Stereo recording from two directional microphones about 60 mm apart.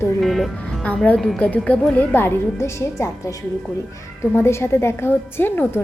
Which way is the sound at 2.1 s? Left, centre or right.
Left.